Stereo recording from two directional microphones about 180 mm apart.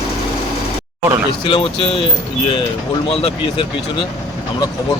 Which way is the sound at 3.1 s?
30° left (ahead or behind).